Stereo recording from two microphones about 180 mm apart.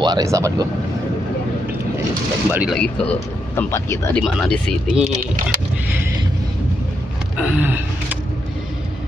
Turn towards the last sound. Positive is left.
turn(degrees=-10)  # may be behind; listen again after turning